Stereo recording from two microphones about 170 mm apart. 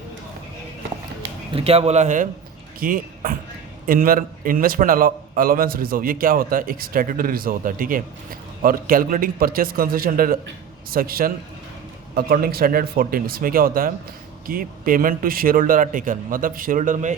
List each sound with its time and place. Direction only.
1.5 s speech: 35° right (ahead or behind)
2.8 s a man's voice: 55° right (ahead or behind)